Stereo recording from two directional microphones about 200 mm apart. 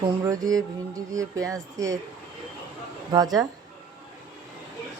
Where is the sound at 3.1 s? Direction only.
20° right (ahead or behind).